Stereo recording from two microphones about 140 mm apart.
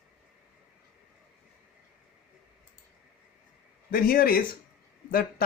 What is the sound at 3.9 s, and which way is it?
A man's voice, 90° left.